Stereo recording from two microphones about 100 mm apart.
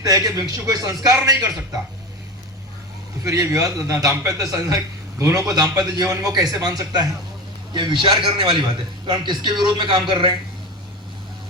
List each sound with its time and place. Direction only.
0.0 s a man's voice: 35° right (ahead or behind)
3.2 s a man's voice: 30° right (ahead or behind)
7.7 s a man's voice: 50° right (ahead or behind)